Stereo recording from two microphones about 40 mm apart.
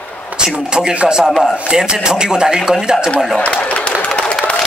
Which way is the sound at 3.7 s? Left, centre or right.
Left.